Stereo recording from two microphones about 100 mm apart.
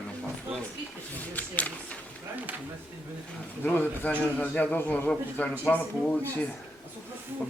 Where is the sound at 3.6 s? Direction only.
15° left (ahead or behind).